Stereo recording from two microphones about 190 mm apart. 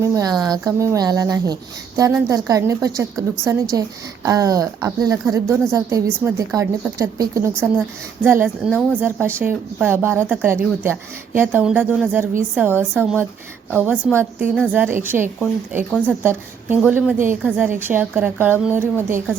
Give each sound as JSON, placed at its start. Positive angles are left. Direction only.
{"t": 0.0, "sound": "a woman's voice", "side_deg": -15}